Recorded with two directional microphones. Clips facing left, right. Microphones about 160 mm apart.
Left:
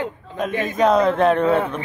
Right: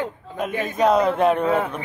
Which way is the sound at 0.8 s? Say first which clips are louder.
Left 1 dB; 10° right (ahead or behind).